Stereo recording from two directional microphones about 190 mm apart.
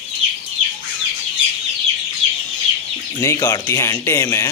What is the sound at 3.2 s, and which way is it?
Speech, 15° left (ahead or behind).